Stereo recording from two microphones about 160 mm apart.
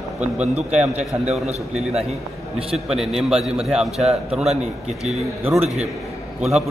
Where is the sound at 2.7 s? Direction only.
5° right (ahead or behind).